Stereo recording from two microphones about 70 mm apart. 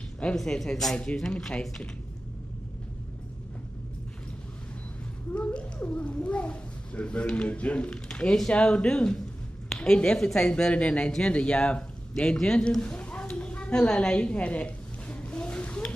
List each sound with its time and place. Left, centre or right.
0.4 s speech: centre
5.3 s a child's voice: centre